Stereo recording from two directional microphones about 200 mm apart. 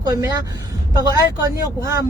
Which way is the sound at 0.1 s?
20° right (ahead or behind).